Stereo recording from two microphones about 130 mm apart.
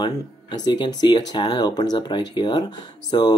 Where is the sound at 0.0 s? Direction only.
35° left (ahead or behind).